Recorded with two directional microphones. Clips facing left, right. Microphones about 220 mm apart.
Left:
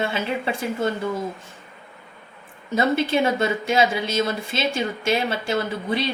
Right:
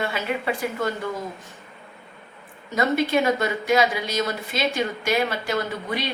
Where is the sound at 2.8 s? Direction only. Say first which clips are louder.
Left 1 dB; 30° left (ahead or behind).